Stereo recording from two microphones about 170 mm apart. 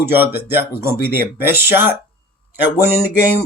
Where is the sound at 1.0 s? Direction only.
60° left (ahead or behind).